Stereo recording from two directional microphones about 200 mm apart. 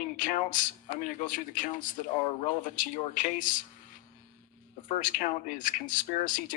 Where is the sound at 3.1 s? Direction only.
40° left (ahead or behind).